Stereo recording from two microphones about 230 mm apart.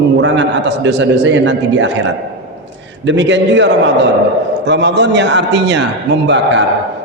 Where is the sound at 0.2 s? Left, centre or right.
Right.